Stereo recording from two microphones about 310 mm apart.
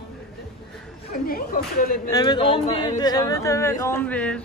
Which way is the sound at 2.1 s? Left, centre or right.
Centre.